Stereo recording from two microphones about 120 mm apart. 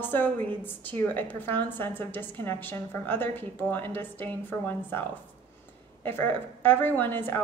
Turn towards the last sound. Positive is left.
turn(degrees=15)  # may be behind; listen again after turning